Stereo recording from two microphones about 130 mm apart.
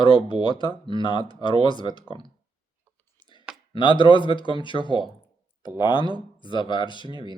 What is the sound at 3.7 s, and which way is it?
Speech, 40° left (ahead or behind).